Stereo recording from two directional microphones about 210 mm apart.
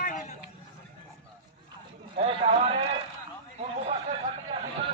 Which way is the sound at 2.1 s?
25° right (ahead or behind).